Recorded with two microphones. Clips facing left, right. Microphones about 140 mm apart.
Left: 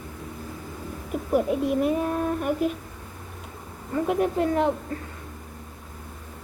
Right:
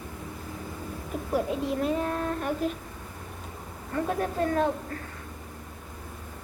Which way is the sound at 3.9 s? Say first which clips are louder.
Left 5 dB; 15° left (ahead or behind).